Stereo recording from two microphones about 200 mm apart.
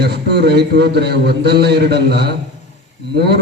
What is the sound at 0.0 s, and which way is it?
A man's voice, 55° right (ahead or behind).